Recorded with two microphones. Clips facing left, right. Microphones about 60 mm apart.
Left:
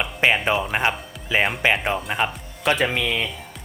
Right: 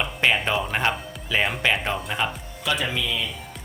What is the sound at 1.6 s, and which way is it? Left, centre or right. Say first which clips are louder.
Speech: left 3 dB; left.